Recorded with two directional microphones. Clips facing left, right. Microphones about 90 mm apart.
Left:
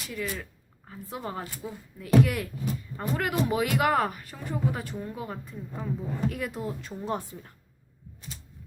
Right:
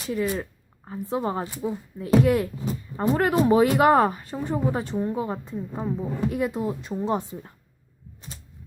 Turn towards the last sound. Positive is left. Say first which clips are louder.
# right 6 dB
turn(degrees=-20)  # may be behind; listen again after turning